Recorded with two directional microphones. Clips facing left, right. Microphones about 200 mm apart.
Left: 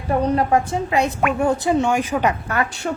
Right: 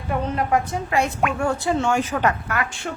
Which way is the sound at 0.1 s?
35° left (ahead or behind).